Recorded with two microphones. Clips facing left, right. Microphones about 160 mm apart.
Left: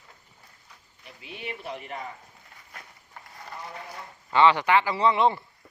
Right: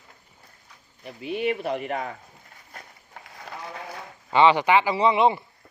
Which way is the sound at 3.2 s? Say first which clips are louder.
Right 2 dB; 90° right.